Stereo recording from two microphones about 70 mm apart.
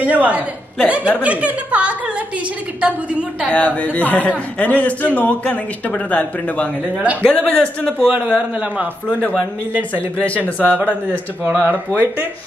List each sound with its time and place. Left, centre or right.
0.0 s speech: right
3.4 s a man's voice: centre
7.0 s speech: centre
7.2 s speech: centre
8.0 s speech: centre
9.9 s a man's voice: left
10.8 s speech: right